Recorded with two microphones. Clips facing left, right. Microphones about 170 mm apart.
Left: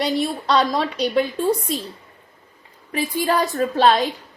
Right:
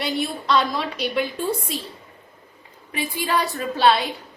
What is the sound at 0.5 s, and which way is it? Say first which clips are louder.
Speech: left 2 dB; 35° left (ahead or behind).